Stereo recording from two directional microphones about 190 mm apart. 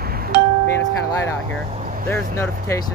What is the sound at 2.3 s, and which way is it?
Speech, 15° left (ahead or behind).